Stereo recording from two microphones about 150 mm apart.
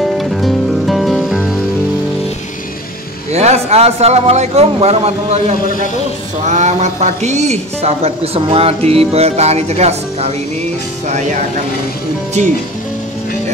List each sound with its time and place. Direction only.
0.0 s music: centre (ahead or behind)
3.3 s speech: 45° right (ahead or behind)